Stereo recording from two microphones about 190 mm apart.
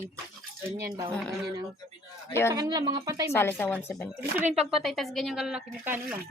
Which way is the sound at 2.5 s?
20° right (ahead or behind).